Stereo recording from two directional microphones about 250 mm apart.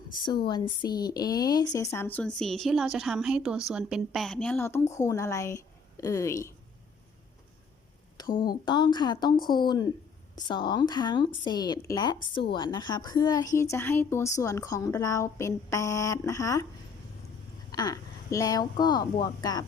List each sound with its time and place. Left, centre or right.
0.4 s a woman's voice: centre
8.4 s a woman's voice: centre
17.7 s a woman's voice: centre